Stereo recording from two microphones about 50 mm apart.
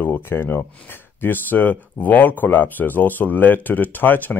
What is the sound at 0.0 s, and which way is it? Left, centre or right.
Speech, left.